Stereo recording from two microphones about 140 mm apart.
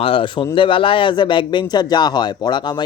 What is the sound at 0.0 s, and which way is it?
Speech, 40° left (ahead or behind).